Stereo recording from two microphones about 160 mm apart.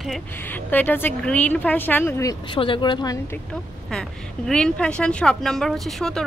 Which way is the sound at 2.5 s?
30° left (ahead or behind).